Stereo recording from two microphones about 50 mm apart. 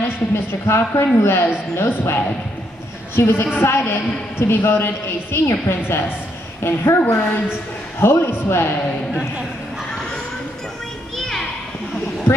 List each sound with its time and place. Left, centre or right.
0.0 s a woman's voice: left
11.1 s children playing: centre